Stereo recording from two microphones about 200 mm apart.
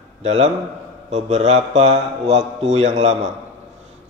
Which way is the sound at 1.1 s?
35° right (ahead or behind).